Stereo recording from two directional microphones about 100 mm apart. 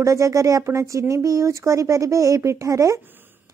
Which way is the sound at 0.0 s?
30° right (ahead or behind).